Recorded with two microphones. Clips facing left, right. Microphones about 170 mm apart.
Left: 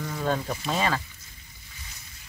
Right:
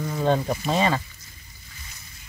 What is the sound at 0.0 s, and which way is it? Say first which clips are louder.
Speech: right 5 dB; 20° right (ahead or behind).